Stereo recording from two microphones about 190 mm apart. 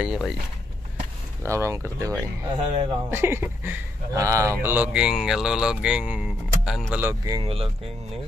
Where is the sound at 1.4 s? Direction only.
15° right (ahead or behind).